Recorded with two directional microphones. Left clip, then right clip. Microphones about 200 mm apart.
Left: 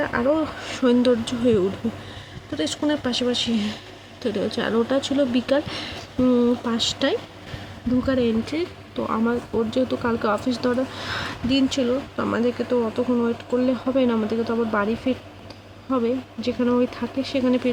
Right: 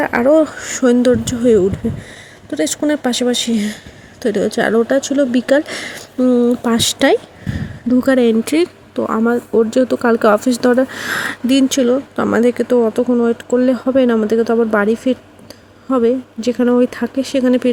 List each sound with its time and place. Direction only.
0.0 s speech: 40° right (ahead or behind)
6.7 s speech: 40° right (ahead or behind)